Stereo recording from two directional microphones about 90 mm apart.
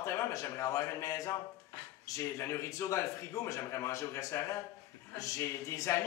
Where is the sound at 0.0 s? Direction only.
35° left (ahead or behind).